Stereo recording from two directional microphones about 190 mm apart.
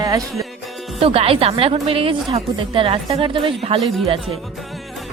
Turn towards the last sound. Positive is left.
turn(degrees=0)  # may be behind; listen again after turning